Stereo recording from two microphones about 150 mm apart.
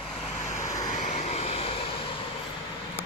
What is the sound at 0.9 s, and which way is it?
Vehicle, 50° left (ahead or behind).